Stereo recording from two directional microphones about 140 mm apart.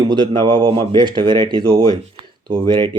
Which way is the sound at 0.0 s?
30° right (ahead or behind).